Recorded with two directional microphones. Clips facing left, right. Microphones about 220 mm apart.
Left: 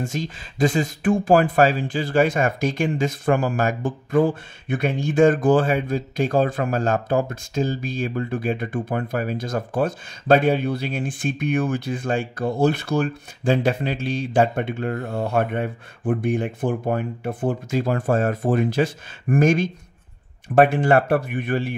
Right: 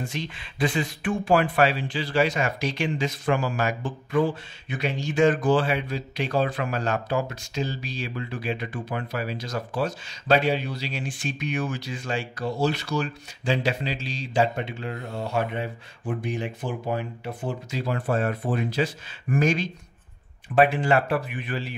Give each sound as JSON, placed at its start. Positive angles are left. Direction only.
{"t": 0.0, "sound": "speech", "side_deg": 45}